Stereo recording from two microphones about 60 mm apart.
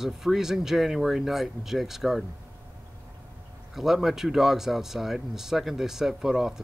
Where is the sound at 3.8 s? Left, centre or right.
Centre.